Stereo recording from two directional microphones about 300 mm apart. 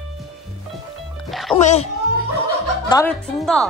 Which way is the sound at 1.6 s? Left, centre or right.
Left.